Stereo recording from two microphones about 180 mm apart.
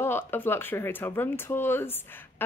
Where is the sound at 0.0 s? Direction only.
10° left (ahead or behind).